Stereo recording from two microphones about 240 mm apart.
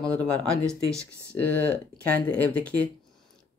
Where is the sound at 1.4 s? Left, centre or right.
Centre.